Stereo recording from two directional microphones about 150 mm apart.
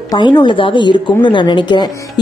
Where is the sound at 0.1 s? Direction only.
30° left (ahead or behind).